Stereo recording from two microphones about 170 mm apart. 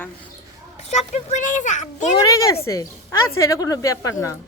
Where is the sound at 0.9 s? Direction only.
40° left (ahead or behind).